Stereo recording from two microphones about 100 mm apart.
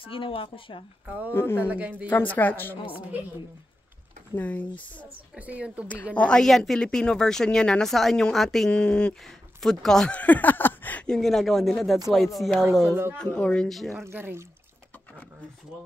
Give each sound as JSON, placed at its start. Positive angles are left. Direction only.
{"t": 0.0, "sound": "speech", "side_deg": 65}
{"t": 1.0, "sound": "speech", "side_deg": -15}
{"t": 1.3, "sound": "a woman's voice", "side_deg": 25}
{"t": 1.7, "sound": "speech", "side_deg": -15}
{"t": 2.0, "sound": "a woman's voice", "side_deg": 20}
{"t": 4.4, "sound": "a woman's voice", "side_deg": 20}
{"t": 5.3, "sound": "speech", "side_deg": -15}
{"t": 6.1, "sound": "a woman's voice", "side_deg": 10}
{"t": 11.1, "sound": "a woman's voice", "side_deg": 5}
{"t": 14.0, "sound": "speech", "side_deg": -20}